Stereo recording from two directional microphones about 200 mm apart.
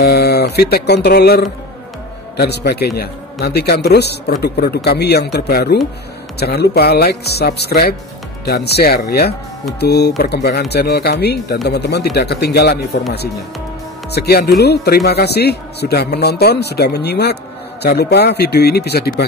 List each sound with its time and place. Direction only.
0.0 s a man's voice: 55° left (ahead or behind)
14.1 s a man's voice: 55° left (ahead or behind)